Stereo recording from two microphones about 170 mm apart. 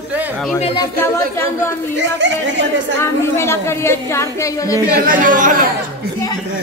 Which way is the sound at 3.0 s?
15° left (ahead or behind).